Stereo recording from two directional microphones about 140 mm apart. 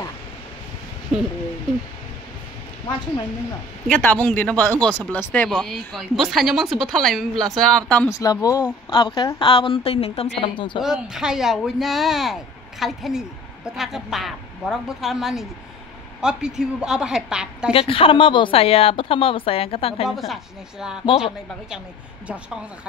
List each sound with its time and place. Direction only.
3.8 s speech: 10° left (ahead or behind)
8.1 s a woman's voice: 25° left (ahead or behind)
9.5 s a woman's voice: 40° left (ahead or behind)
10.8 s speech: 5° right (ahead or behind)
17.7 s a woman's voice: 40° left (ahead or behind)
20.1 s speech: centre (ahead or behind)